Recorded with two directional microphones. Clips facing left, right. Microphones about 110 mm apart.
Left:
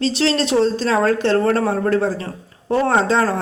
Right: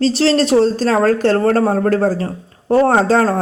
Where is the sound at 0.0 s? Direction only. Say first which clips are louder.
Right 5 dB; 40° right (ahead or behind).